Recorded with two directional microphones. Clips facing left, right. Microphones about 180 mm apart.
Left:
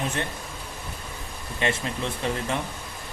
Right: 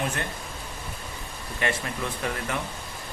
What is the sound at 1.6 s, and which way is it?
Speech, 25° left (ahead or behind).